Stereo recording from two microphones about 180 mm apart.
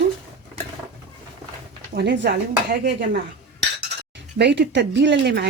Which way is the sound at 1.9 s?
70° right (ahead or behind).